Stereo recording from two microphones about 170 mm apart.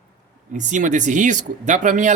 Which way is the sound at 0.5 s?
45° right (ahead or behind).